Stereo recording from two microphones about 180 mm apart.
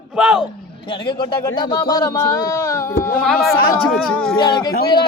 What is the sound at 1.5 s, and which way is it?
Speech, 20° left (ahead or behind).